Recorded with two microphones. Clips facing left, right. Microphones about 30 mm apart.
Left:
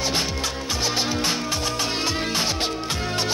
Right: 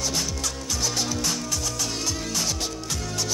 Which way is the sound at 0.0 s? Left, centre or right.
Left.